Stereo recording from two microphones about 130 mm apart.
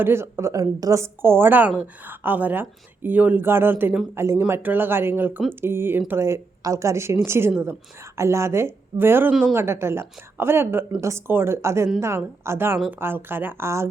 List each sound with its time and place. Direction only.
0.0 s a woman's voice: 20° right (ahead or behind)